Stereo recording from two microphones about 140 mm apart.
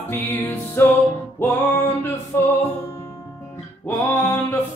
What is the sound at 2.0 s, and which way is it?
Music, 15° left (ahead or behind).